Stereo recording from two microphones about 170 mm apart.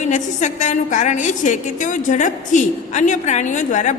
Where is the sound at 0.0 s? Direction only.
45° left (ahead or behind).